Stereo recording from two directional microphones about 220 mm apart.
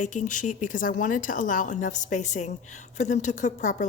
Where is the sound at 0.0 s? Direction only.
35° left (ahead or behind).